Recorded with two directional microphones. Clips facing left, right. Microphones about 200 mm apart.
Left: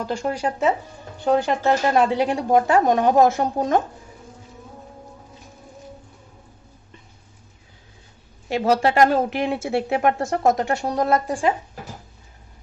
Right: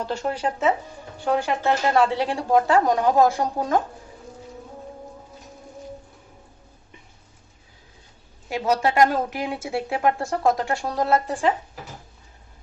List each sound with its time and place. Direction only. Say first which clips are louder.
0.0 s speech: left 1 dB; 10° left (ahead or behind)
8.4 s speech: left 3 dB; 30° left (ahead or behind)